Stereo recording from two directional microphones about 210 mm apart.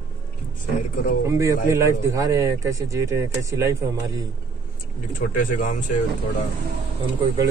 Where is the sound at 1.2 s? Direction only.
15° right (ahead or behind).